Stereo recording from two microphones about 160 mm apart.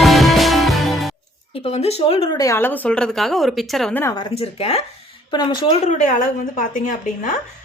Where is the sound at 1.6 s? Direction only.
40° left (ahead or behind).